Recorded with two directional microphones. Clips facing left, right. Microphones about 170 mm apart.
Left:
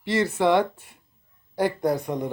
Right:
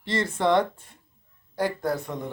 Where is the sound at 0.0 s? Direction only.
5° left (ahead or behind).